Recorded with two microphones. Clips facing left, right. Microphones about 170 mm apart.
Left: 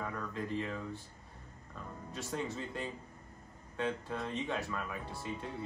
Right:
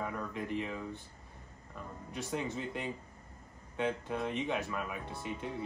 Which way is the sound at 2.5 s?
15° right (ahead or behind).